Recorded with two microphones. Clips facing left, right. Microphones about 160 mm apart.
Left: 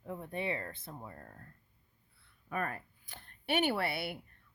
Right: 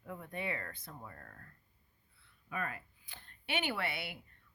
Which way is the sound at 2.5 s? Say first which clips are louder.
Left 4 dB; 45° left (ahead or behind).